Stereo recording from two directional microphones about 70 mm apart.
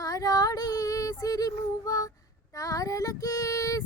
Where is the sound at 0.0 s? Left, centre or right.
Left.